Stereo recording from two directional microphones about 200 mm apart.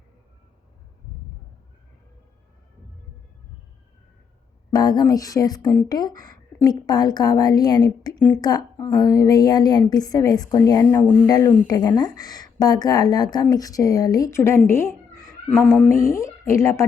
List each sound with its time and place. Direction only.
4.7 s a woman's voice: 20° left (ahead or behind)
15.4 s a woman's voice: centre (ahead or behind)